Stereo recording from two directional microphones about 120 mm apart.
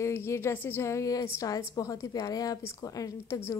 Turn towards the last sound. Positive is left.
turn(degrees=25)  # may be behind; listen again after turning